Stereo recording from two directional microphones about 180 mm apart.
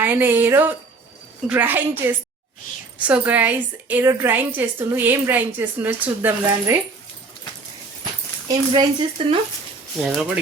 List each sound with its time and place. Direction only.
0.0 s a woman's voice: 10° right (ahead or behind)
8.4 s speech: 25° right (ahead or behind)
10.0 s speech: centre (ahead or behind)